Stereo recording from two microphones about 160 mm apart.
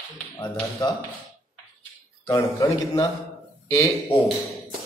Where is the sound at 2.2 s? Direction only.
20° left (ahead or behind).